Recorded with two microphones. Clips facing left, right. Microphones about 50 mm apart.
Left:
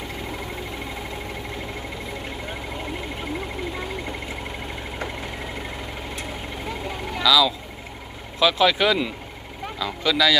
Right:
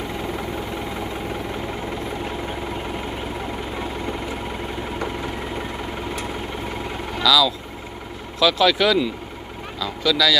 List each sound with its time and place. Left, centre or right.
7.2 s speech: centre